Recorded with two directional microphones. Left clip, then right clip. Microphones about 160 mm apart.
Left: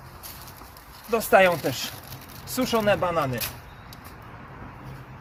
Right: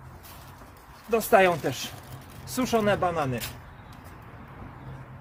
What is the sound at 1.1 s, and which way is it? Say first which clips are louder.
Speech: left 2 dB; 25° right (ahead or behind).